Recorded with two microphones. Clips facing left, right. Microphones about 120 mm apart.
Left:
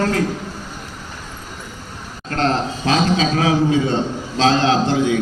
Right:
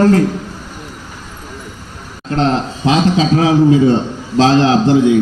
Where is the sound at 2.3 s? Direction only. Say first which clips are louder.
Right 4 dB; 20° right (ahead or behind).